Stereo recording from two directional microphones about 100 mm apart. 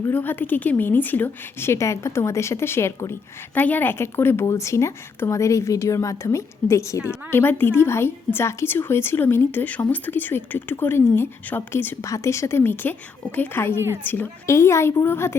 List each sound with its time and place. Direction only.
0.0 s a woman's voice: 20° left (ahead or behind)